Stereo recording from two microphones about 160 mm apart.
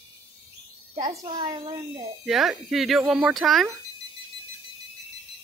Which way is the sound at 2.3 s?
Centre (ahead or behind).